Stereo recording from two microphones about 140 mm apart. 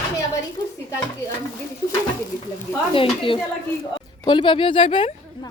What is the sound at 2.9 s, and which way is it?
Speech, 40° left (ahead or behind).